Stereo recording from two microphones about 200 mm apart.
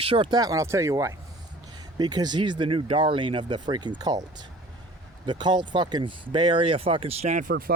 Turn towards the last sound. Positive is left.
turn(degrees=-45)  # may be behind; listen again after turning